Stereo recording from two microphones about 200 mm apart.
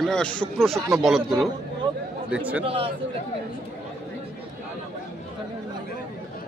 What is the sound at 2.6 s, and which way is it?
Speech, 30° right (ahead or behind).